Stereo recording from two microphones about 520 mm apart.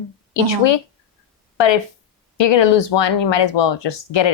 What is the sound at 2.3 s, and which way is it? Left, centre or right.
Speech, left.